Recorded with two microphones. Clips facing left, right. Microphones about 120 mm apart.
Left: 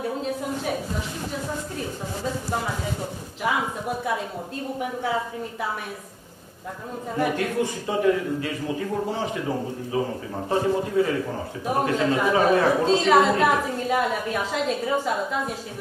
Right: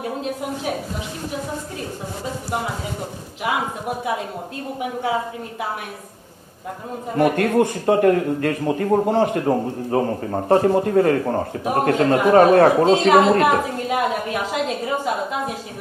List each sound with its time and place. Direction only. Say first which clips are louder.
0.0 s speech: right 1 dB; 65° right (ahead or behind)
7.2 s speech: right 7 dB; 60° right (ahead or behind)